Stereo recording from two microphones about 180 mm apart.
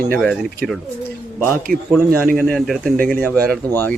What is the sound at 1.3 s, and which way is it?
Speech, 10° right (ahead or behind).